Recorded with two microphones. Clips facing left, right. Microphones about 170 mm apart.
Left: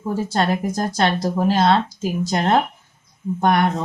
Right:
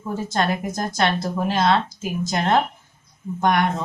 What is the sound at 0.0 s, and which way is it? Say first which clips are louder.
Speech: left 2 dB; 35° left (ahead or behind).